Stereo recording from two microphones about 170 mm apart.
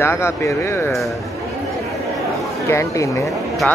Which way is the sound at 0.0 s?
15° left (ahead or behind).